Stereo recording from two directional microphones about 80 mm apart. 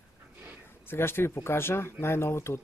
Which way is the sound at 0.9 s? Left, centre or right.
Left.